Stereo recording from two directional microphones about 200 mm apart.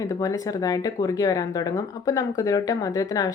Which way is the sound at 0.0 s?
15° left (ahead or behind).